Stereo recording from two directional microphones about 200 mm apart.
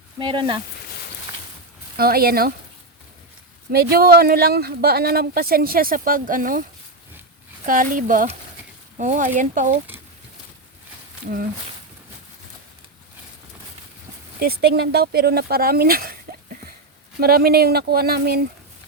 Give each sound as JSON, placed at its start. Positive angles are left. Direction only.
{"t": 0.2, "sound": "speech", "side_deg": -25}
{"t": 2.0, "sound": "speech", "side_deg": -50}
{"t": 3.7, "sound": "speech", "side_deg": -50}
{"t": 14.3, "sound": "speech", "side_deg": -50}